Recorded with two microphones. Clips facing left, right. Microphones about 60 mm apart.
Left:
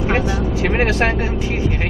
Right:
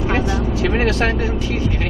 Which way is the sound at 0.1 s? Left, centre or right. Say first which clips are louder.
Even; left.